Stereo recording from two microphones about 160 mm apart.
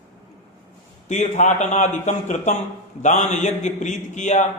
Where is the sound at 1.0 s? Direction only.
45° left (ahead or behind).